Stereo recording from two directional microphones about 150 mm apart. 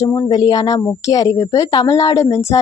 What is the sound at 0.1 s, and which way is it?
A woman's voice, 25° left (ahead or behind).